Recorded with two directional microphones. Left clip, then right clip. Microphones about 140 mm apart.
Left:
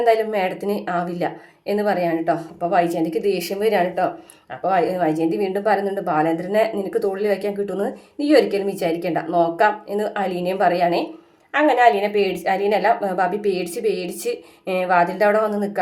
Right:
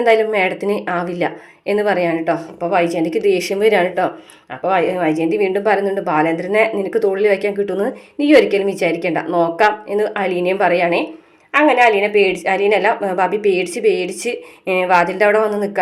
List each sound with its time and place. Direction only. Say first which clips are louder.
0.0 s a woman's voice: right 4 dB; 25° right (ahead or behind)